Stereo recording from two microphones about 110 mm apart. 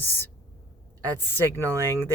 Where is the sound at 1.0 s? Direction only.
30° right (ahead or behind).